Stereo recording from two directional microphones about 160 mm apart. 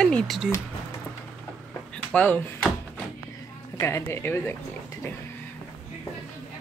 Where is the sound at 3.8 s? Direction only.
15° left (ahead or behind).